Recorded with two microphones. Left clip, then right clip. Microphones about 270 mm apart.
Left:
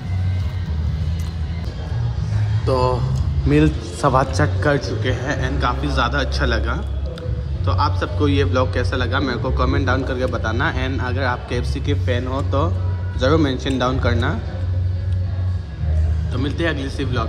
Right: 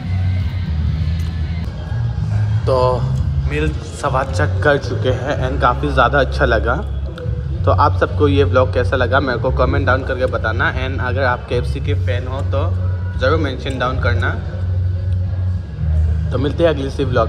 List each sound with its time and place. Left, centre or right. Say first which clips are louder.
2.6 s a man's voice: right 4 dB; centre
16.3 s a man's voice: right 7 dB; centre